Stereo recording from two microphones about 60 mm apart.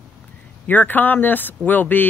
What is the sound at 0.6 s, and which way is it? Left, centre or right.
Speech, left.